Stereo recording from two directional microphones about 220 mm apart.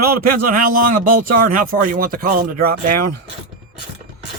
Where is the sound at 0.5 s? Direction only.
40° right (ahead or behind).